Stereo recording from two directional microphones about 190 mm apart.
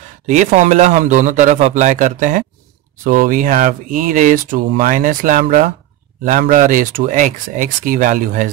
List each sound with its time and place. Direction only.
0.3 s a man's voice: 40° right (ahead or behind)